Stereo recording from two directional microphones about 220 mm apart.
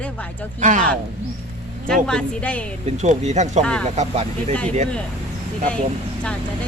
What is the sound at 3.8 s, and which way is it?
Speech, 30° right (ahead or behind).